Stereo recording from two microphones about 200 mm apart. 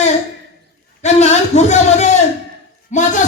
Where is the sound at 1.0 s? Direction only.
35° left (ahead or behind).